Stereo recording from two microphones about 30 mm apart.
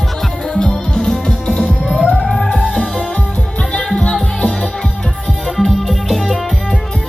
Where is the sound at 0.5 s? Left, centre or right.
Left.